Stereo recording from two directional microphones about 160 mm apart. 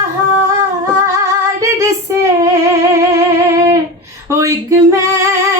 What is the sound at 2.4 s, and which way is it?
Music, 20° right (ahead or behind).